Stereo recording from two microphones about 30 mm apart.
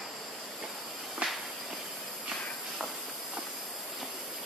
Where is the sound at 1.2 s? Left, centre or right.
Right.